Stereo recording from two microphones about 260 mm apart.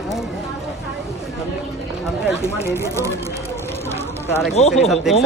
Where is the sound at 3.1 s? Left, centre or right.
Centre.